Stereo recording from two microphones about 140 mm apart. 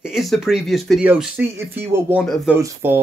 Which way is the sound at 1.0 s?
15° right (ahead or behind).